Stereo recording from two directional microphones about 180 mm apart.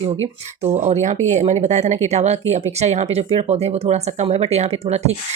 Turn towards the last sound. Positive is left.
turn(degrees=-35)  # may be behind; listen again after turning